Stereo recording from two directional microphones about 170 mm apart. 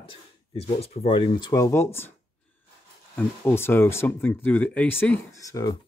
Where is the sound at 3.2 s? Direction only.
15° left (ahead or behind).